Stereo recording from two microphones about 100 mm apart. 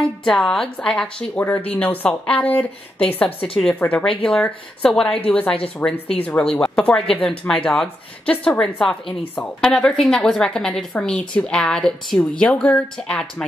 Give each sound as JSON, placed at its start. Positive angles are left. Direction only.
{"t": 0.2, "sound": "a woman's voice", "side_deg": 5}